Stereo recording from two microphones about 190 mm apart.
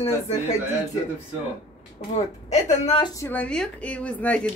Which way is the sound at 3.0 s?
15° left (ahead or behind).